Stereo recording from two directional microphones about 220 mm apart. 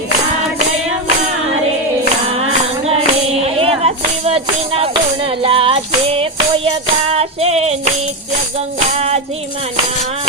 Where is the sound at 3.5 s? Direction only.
25° right (ahead or behind).